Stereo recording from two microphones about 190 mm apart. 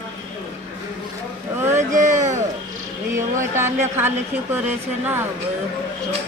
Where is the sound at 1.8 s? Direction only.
40° right (ahead or behind).